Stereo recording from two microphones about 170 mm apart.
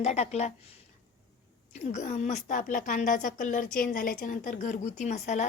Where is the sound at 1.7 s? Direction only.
45° left (ahead or behind).